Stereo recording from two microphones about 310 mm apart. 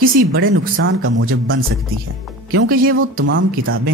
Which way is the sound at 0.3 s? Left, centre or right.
Right.